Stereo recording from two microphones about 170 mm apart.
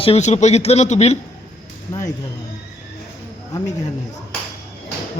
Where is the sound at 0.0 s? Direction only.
40° left (ahead or behind).